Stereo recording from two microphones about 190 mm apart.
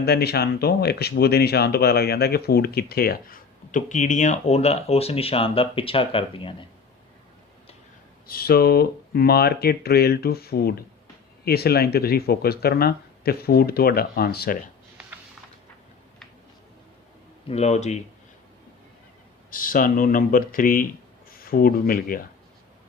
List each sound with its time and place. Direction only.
0.0 s speech: 60° left (ahead or behind); by 6.5 s 30° left (ahead or behind)
8.3 s speech: 55° left (ahead or behind)
17.5 s speech: 35° left (ahead or behind)
19.5 s speech: 45° left (ahead or behind)